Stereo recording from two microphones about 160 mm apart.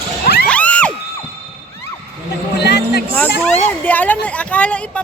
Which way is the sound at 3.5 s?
10° left (ahead or behind).